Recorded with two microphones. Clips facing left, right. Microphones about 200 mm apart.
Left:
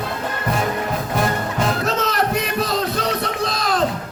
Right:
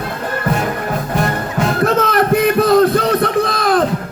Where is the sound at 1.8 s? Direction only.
55° right (ahead or behind).